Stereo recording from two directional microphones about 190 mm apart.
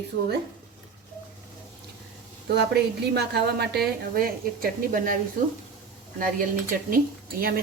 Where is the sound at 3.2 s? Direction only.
60° right (ahead or behind).